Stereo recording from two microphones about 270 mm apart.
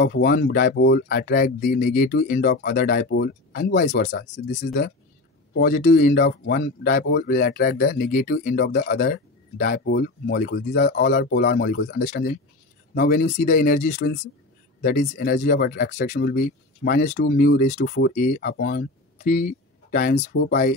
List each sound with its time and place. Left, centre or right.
0.0 s speech: left